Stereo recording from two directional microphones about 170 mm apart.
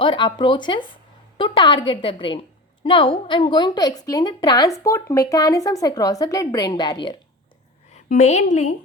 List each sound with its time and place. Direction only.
0.0 s a woman's voice: 30° left (ahead or behind)
8.1 s a woman's voice: 45° left (ahead or behind)